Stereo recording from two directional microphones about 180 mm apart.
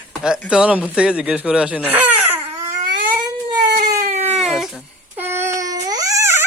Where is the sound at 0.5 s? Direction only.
5° right (ahead or behind).